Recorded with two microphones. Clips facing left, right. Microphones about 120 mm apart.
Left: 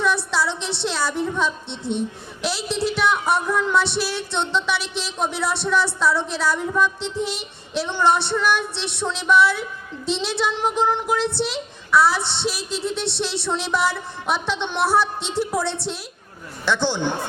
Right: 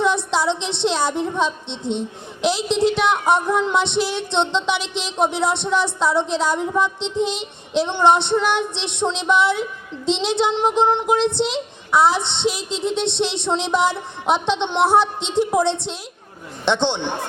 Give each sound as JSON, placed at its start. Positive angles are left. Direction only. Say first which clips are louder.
{"t": 0.0, "sound": "a woman's voice", "louder": "right 3 dB", "side_deg": -20}